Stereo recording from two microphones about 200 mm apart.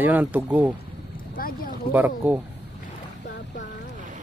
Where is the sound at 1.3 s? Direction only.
45° left (ahead or behind).